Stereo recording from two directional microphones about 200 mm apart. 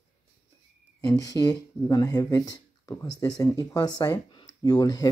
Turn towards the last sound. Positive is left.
turn(degrees=20)  # may be behind; listen again after turning